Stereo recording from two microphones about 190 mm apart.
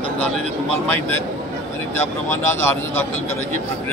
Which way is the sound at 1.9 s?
15° left (ahead or behind).